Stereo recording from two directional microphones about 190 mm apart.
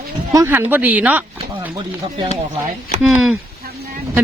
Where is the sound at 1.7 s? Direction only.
25° right (ahead or behind).